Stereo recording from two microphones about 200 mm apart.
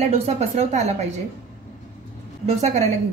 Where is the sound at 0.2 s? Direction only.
35° right (ahead or behind).